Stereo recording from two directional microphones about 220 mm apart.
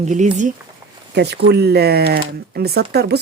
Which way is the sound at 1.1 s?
50° right (ahead or behind).